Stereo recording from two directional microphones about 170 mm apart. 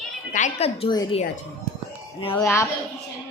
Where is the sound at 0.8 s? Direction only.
30° left (ahead or behind).